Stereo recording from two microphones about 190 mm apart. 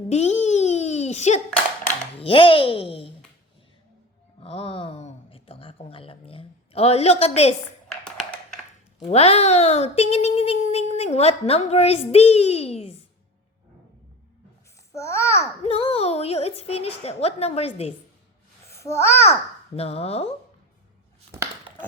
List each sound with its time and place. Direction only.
0.1 s a sound: 35° left (ahead or behind)
2.1 s speech: 30° left (ahead or behind)
4.4 s a sound: 30° left (ahead or behind)
8.0 s a sound: 5° left (ahead or behind)
9.0 s speech: 35° left (ahead or behind)
14.9 s a child's voice: 15° left (ahead or behind)
15.6 s speech: 30° left (ahead or behind)
18.7 s a child's voice: 15° left (ahead or behind)
19.7 s speech: 30° left (ahead or behind)